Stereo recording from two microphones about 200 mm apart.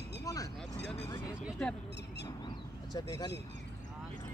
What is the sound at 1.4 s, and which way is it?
Speech, centre (ahead or behind).